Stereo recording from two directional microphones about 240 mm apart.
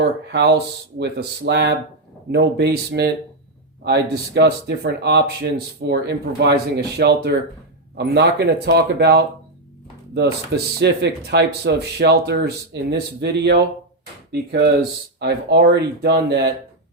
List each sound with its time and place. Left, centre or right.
0.0 s speech: right
15.2 s speech: right